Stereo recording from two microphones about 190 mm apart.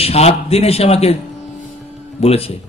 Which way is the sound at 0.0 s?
30° left (ahead or behind).